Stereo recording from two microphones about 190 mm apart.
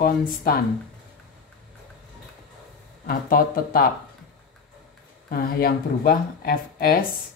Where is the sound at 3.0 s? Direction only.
50° left (ahead or behind).